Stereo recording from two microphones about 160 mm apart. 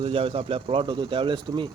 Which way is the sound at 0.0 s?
35° right (ahead or behind).